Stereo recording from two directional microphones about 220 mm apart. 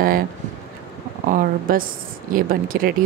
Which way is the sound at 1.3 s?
40° right (ahead or behind).